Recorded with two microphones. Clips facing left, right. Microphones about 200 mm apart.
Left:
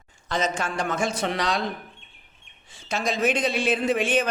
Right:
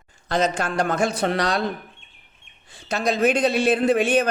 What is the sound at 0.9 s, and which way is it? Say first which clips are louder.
Speech: right 3 dB; 60° right (ahead or behind).